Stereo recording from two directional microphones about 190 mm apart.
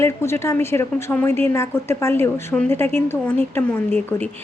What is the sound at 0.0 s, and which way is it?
A woman's voice, 15° left (ahead or behind).